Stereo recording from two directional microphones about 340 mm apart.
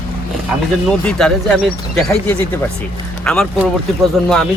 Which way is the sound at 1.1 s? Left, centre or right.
Centre.